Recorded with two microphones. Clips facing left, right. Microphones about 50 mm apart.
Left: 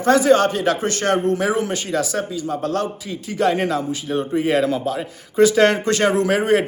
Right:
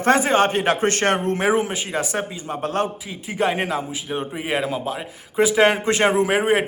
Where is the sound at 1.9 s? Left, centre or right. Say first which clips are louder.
Left 3 dB; right.